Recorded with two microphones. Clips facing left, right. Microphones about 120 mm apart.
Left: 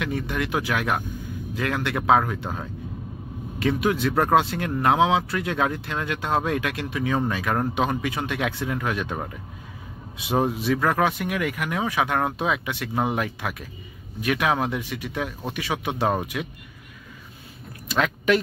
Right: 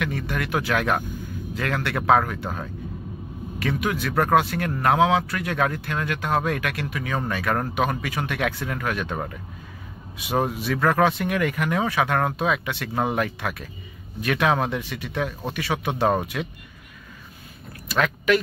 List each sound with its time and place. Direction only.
0.0 s speech: 15° left (ahead or behind)
3.5 s speech: 25° left (ahead or behind); by 16.5 s 5° left (ahead or behind)
17.8 s speech: 15° left (ahead or behind)